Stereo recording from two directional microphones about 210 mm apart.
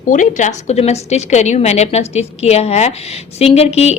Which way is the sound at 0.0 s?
40° left (ahead or behind).